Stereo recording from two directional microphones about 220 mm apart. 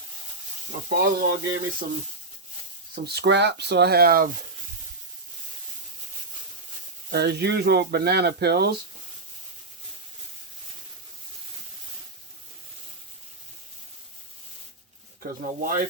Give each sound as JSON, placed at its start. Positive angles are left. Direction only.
{"t": 0.9, "sound": "speech", "side_deg": -40}
{"t": 2.9, "sound": "speech", "side_deg": -45}
{"t": 7.1, "sound": "speech", "side_deg": -45}
{"t": 15.2, "sound": "speech", "side_deg": -40}